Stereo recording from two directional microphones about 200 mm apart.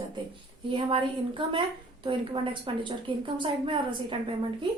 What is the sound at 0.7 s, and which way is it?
A woman's voice, 25° right (ahead or behind).